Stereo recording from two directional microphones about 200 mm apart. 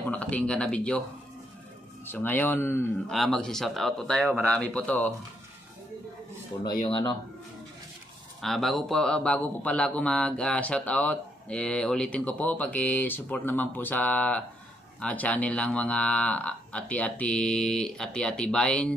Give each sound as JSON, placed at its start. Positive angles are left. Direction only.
{"t": 0.1, "sound": "speech", "side_deg": 5}
{"t": 2.0, "sound": "a man's voice", "side_deg": 10}
{"t": 6.9, "sound": "speech", "side_deg": 25}
{"t": 8.4, "sound": "a man's voice", "side_deg": 0}